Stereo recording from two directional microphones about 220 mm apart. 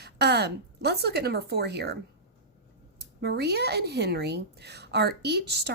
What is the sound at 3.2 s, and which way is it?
A woman's voice, 50° right (ahead or behind).